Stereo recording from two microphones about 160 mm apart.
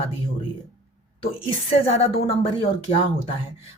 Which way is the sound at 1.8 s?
40° left (ahead or behind).